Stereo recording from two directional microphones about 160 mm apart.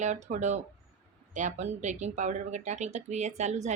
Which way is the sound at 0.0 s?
50° right (ahead or behind).